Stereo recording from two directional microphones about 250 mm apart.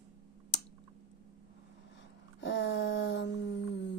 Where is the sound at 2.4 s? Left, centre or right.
Left.